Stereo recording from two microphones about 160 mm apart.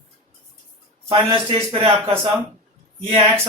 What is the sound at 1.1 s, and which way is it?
Speech, 35° right (ahead or behind).